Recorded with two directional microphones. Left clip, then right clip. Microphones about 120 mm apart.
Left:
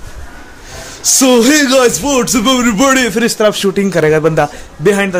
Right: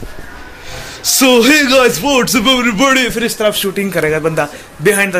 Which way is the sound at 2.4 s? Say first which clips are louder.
Even; 75° left (ahead or behind).